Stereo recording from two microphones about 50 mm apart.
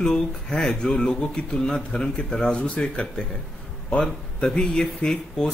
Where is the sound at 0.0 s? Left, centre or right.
Centre.